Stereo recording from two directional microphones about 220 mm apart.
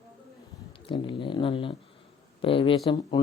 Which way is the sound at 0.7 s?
20° left (ahead or behind).